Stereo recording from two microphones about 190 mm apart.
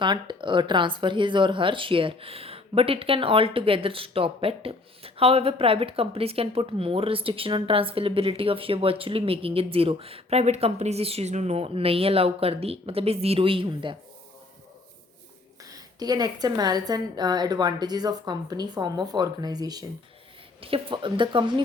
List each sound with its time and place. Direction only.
0.0 s speech: 25° right (ahead or behind)
15.7 s speech: 20° right (ahead or behind)